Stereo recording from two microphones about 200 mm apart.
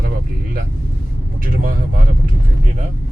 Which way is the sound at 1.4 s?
45° right (ahead or behind).